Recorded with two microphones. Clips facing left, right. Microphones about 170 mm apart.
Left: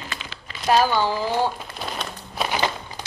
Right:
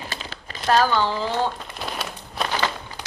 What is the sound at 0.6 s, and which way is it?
Speech, 15° left (ahead or behind).